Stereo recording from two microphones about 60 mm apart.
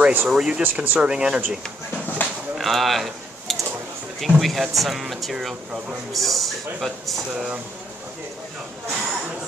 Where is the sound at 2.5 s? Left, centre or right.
Centre.